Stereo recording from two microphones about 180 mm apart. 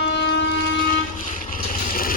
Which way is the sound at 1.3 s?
50° left (ahead or behind).